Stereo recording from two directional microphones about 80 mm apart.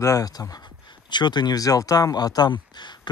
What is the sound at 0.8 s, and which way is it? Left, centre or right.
Speech, left.